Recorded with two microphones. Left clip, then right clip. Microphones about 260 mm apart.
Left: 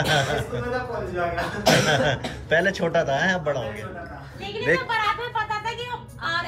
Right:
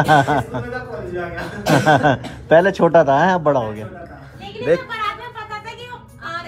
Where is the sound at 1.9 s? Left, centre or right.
Centre.